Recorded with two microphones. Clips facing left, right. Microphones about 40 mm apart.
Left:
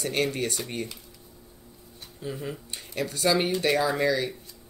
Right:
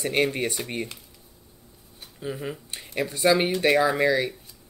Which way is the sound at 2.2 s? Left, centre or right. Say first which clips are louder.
Right 2 dB; centre.